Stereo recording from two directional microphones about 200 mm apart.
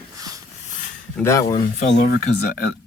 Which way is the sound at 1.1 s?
15° left (ahead or behind).